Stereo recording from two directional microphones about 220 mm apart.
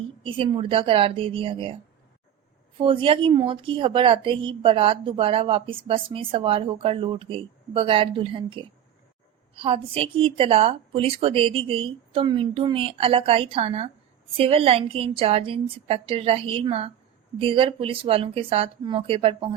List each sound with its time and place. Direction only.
0.2 s a woman's voice: 25° right (ahead or behind)
2.7 s a woman's voice: 25° right (ahead or behind)